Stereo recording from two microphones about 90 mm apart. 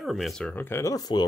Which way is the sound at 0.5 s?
25° left (ahead or behind).